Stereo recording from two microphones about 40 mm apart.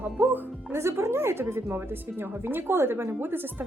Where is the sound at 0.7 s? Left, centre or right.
Right.